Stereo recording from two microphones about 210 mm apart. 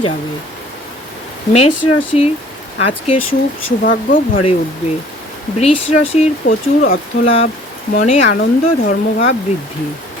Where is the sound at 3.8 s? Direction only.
40° left (ahead or behind).